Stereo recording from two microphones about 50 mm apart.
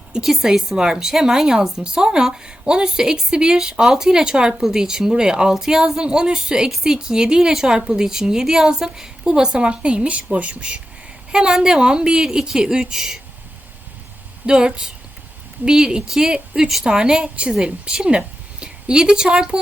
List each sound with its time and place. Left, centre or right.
0.2 s a woman's voice: centre
14.4 s a woman's voice: centre